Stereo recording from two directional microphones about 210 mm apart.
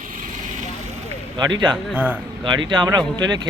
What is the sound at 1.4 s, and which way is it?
Speech, 20° right (ahead or behind).